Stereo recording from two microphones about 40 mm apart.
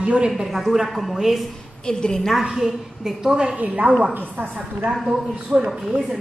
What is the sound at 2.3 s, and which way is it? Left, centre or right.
A woman's voice, centre.